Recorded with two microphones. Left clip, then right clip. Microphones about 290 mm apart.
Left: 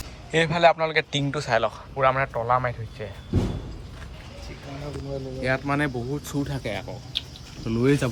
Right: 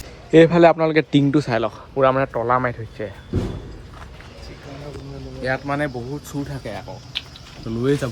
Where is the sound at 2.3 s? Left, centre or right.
Right.